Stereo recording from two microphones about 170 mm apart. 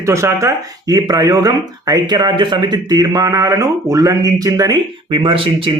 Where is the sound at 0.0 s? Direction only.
15° right (ahead or behind).